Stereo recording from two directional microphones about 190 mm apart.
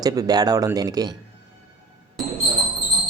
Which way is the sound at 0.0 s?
20° right (ahead or behind).